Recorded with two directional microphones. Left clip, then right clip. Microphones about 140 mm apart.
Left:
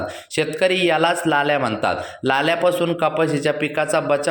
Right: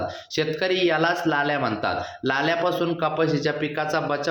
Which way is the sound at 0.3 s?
15° left (ahead or behind).